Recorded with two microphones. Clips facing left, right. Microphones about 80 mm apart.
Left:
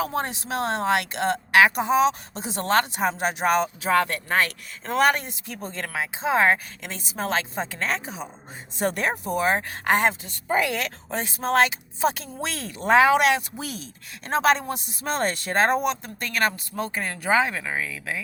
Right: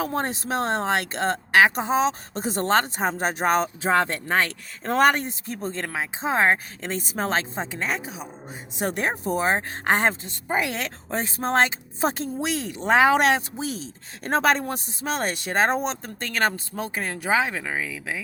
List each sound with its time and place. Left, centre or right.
0.2 s speech: right
7.6 s speech: centre
8.0 s speech: centre
8.8 s speech: centre; by 12.3 s right
12.4 s speech: centre
14.3 s speech: right
15.2 s speech: centre
16.2 s speech: right
16.9 s speech: centre